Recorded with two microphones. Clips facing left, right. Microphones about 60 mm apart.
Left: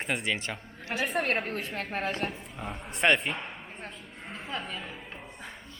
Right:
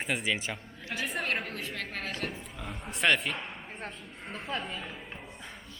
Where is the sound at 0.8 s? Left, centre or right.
Left.